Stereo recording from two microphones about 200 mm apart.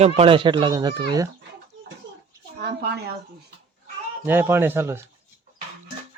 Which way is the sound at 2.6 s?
55° right (ahead or behind).